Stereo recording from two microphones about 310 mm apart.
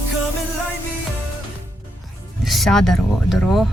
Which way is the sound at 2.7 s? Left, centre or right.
Centre.